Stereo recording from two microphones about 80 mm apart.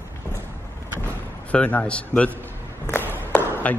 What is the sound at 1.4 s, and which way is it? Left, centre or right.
Speech, centre.